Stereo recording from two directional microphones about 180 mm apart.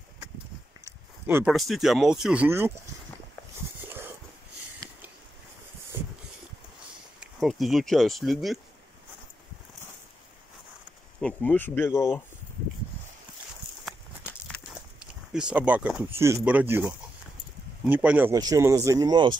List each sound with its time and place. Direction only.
1.2 s speech: 5° right (ahead or behind)
7.2 s speech: centre (ahead or behind)
11.1 s speech: 5° left (ahead or behind)
15.3 s speech: 5° right (ahead or behind); by 19.3 s 25° right (ahead or behind)